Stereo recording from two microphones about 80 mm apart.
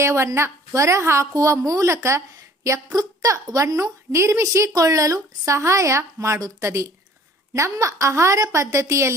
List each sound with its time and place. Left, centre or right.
0.0 s a woman's voice: right